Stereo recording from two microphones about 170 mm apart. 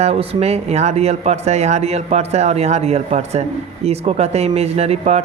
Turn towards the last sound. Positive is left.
turn(degrees=-40)  # may be behind; listen again after turning